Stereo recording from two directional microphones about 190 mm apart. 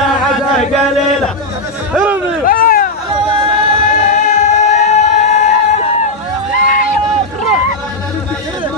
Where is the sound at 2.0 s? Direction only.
10° right (ahead or behind).